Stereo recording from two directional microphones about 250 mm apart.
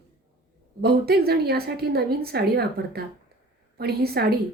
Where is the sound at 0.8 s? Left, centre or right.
Right.